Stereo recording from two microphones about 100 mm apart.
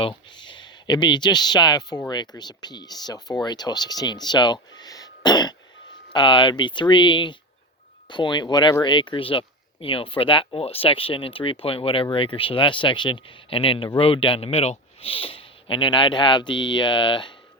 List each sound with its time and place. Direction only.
0.0 s speech: 55° left (ahead or behind)